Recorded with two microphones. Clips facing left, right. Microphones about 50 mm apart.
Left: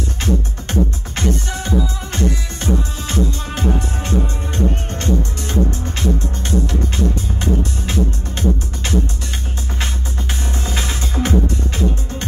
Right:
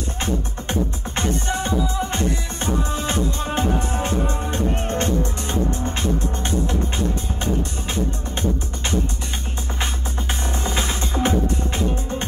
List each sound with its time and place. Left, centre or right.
0.2 s music: centre
5.5 s music: centre
7.9 s music: centre
10.4 s music: centre